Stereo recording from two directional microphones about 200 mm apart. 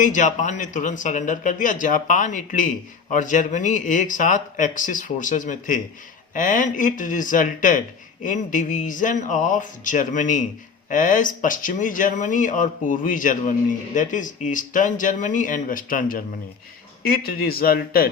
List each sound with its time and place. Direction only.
0.0 s speech: 40° left (ahead or behind)